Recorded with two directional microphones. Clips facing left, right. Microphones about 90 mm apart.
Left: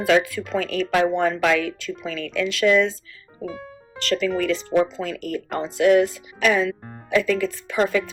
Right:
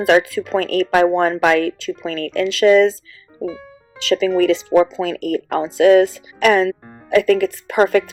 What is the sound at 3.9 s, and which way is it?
Speech, 90° right.